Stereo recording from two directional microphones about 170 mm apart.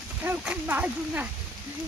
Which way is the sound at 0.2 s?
10° right (ahead or behind).